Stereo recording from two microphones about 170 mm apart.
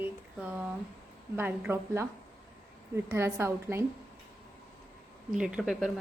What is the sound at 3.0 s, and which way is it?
Speech, 15° right (ahead or behind).